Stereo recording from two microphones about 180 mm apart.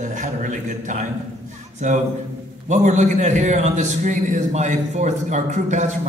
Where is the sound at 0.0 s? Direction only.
45° right (ahead or behind).